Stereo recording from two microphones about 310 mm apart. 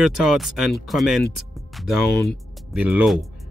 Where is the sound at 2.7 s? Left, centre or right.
Centre.